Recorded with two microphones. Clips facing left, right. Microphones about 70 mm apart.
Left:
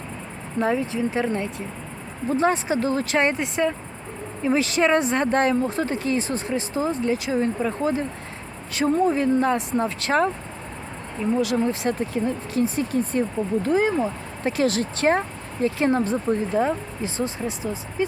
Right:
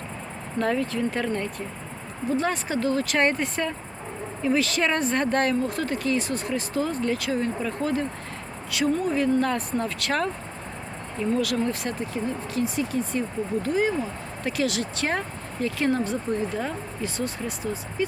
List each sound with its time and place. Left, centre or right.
0.6 s speech: centre
3.2 s speech: centre
8.7 s speech: left
11.3 s speech: left
12.2 s speech: left